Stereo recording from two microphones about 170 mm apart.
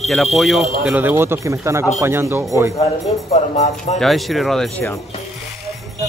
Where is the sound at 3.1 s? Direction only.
35° left (ahead or behind).